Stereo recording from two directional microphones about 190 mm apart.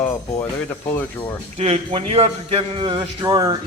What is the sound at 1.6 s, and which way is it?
A man's voice, 30° right (ahead or behind).